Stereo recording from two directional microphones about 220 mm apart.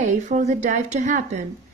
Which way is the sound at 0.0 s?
35° right (ahead or behind).